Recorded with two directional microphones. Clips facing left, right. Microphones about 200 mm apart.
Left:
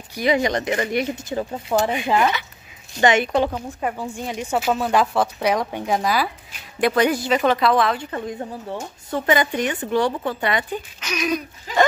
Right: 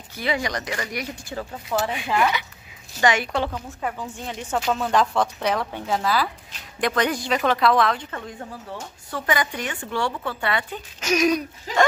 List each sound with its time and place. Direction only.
0.1 s a woman's voice: 15° left (ahead or behind)
8.1 s speech: 20° left (ahead or behind)
11.0 s speech: 45° right (ahead or behind)